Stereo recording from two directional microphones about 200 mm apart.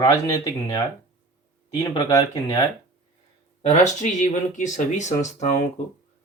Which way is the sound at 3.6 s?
35° left (ahead or behind).